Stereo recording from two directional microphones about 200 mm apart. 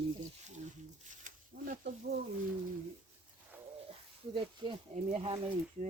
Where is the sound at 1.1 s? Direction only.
40° right (ahead or behind).